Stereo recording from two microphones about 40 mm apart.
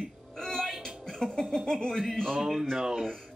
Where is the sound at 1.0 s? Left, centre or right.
Centre.